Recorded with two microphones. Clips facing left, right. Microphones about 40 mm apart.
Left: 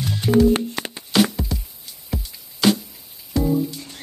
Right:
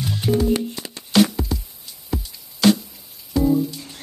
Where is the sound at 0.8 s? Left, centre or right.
Left.